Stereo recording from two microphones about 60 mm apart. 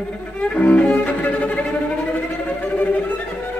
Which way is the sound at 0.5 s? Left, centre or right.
Left.